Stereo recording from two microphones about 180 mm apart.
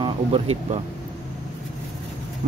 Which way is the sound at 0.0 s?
35° right (ahead or behind).